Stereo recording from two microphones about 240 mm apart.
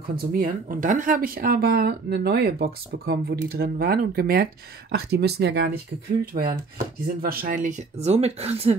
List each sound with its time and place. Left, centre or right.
0.0 s speech: right